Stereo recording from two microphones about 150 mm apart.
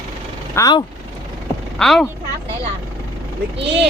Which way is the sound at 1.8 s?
5° left (ahead or behind).